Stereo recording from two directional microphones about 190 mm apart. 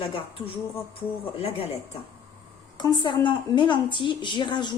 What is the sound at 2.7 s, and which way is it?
A woman's voice, 25° left (ahead or behind).